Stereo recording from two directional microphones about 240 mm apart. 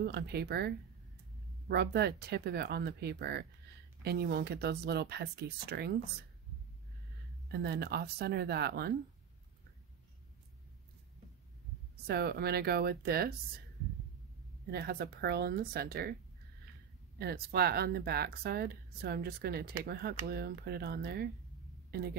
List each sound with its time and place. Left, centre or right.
0.0 s speech: right
7.5 s speech: right
12.1 s speech: right
14.7 s speech: right
17.2 s speech: right